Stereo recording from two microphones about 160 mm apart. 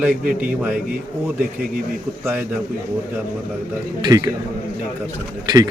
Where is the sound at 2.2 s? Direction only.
10° right (ahead or behind).